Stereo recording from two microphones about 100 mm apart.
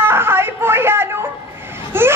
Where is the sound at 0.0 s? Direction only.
25° right (ahead or behind).